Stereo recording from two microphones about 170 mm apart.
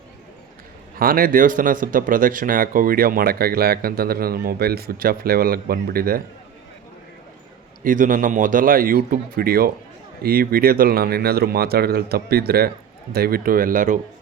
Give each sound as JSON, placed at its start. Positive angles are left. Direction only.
{"t": 0.9, "sound": "speech", "side_deg": -55}
{"t": 7.9, "sound": "speech", "side_deg": -50}